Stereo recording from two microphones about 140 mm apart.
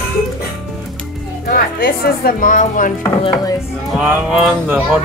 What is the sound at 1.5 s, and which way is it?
Speech, 90° left.